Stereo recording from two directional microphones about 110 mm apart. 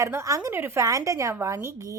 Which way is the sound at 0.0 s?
25° right (ahead or behind).